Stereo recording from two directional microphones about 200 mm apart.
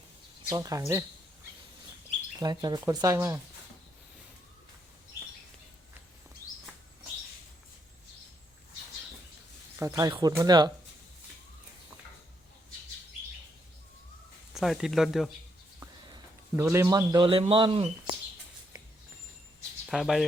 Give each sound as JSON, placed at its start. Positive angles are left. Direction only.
{"t": 0.4, "sound": "speech", "side_deg": -15}
{"t": 2.4, "sound": "speech", "side_deg": -20}
{"t": 9.7, "sound": "speech", "side_deg": -15}
{"t": 14.5, "sound": "speech", "side_deg": 0}
{"t": 15.8, "sound": "a man's voice", "side_deg": -15}
{"t": 19.9, "sound": "speech", "side_deg": 0}